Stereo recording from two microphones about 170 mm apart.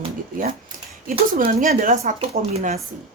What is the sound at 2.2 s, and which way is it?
Speech, 40° right (ahead or behind).